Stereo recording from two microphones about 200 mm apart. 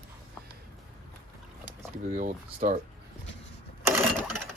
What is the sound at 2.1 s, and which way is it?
Speech, 35° right (ahead or behind).